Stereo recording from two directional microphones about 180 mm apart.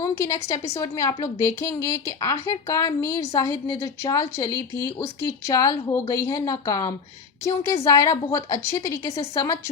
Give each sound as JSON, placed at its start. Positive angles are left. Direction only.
{"t": 0.0, "sound": "a woman's voice", "side_deg": 20}